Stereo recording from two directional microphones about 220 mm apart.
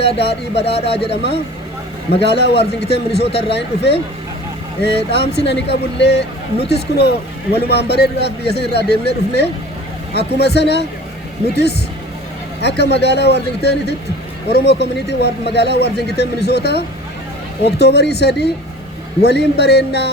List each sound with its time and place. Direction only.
0.5 s speech: 25° left (ahead or behind)
2.2 s speech: 50° left (ahead or behind)